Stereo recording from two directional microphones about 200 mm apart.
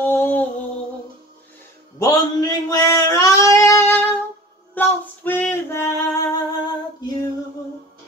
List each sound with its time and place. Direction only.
0.0 s music: 10° left (ahead or behind)
2.0 s a sound: 15° left (ahead or behind)
4.7 s female singing: 10° left (ahead or behind)